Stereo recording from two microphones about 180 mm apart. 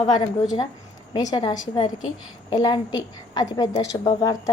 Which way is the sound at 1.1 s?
25° left (ahead or behind).